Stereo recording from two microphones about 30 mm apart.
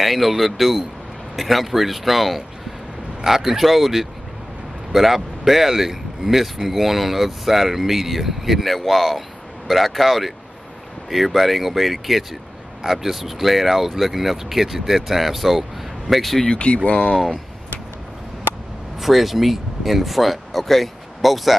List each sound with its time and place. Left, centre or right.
0.0 s speech: centre
16.5 s speech: left
18.9 s speech: centre